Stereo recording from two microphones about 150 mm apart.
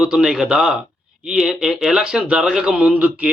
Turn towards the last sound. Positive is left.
turn(degrees=-10)  # may be behind; listen again after turning